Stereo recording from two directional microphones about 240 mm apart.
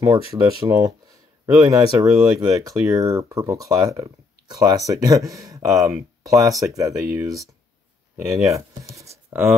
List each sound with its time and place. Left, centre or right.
0.7 s speech: centre